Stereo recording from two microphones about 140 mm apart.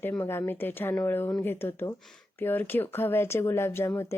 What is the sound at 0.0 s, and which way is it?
A woman's voice, 15° left (ahead or behind).